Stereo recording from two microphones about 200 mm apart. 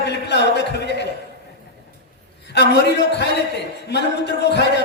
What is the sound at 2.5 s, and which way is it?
Speech, 55° left (ahead or behind).